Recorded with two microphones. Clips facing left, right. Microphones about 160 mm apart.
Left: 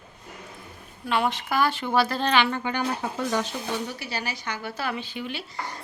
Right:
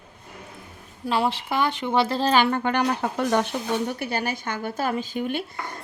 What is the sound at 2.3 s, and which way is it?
Speech, 45° right (ahead or behind).